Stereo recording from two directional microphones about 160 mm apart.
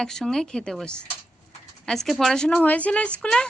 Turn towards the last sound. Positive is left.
turn(degrees=5)  # may be behind; listen again after turning